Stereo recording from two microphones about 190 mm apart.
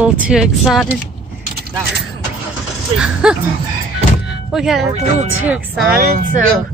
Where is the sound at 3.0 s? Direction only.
5° right (ahead or behind).